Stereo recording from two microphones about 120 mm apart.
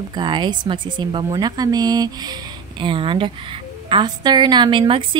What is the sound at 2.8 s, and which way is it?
A woman's voice, 45° right (ahead or behind).